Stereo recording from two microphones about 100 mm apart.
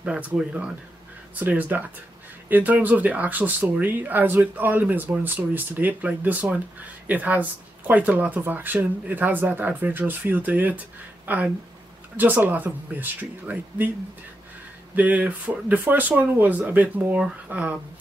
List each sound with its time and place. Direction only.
0.0 s speech: 10° right (ahead or behind)
15.0 s speech: 15° right (ahead or behind)